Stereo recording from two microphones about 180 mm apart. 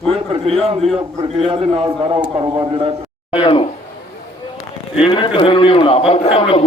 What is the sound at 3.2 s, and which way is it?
Speech, 30° left (ahead or behind).